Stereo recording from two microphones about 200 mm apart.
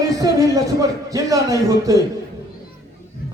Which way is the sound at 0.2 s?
15° right (ahead or behind).